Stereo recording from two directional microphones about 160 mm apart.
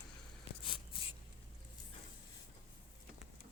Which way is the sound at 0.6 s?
35° left (ahead or behind).